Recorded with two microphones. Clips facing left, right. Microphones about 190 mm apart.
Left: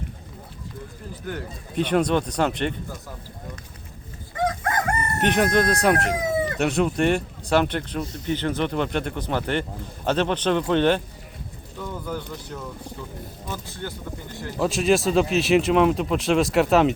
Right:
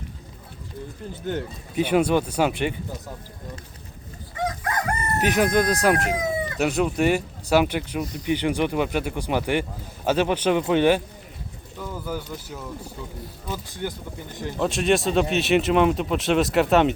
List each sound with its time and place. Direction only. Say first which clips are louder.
1.2 s speech: right 4 dB; 25° right (ahead or behind)
1.7 s speech: right 1 dB; 10° right (ahead or behind)
5.2 s speech: even; 5° right (ahead or behind)
14.6 s speech: left 1 dB; centre (ahead or behind)